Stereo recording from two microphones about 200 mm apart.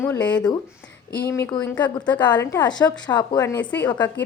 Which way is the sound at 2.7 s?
20° left (ahead or behind).